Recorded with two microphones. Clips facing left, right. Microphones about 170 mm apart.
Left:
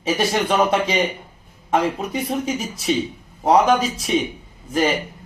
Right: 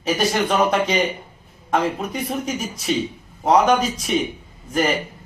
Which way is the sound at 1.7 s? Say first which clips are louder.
Left 1 dB; 30° left (ahead or behind).